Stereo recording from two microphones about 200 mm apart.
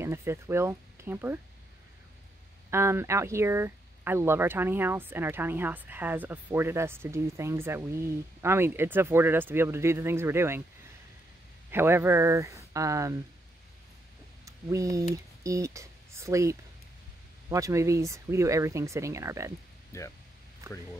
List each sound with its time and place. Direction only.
0.0 s speech: 10° right (ahead or behind)
2.7 s speech: 15° right (ahead or behind)
11.7 s speech: 10° right (ahead or behind)
14.4 s speech: 15° right (ahead or behind)
19.9 s speech: 15° left (ahead or behind)
20.6 s speech: 15° right (ahead or behind)